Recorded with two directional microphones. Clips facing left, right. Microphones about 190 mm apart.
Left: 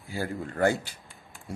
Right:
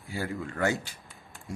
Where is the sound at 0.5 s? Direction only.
35° left (ahead or behind).